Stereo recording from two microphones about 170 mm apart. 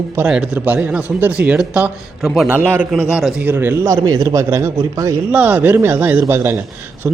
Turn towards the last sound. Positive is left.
turn(degrees=-15)  # may be behind; listen again after turning